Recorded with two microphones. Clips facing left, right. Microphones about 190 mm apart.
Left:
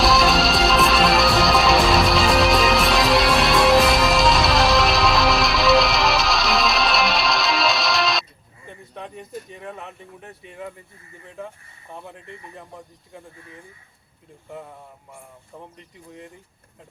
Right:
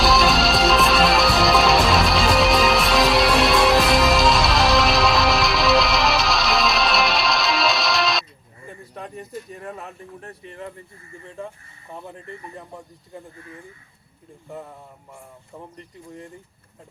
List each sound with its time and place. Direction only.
0.0 s music: centre (ahead or behind)
9.0 s speech: 5° right (ahead or behind)